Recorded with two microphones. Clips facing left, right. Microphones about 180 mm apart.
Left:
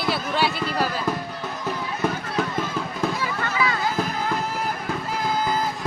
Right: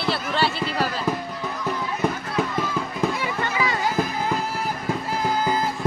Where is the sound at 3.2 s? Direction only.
25° right (ahead or behind).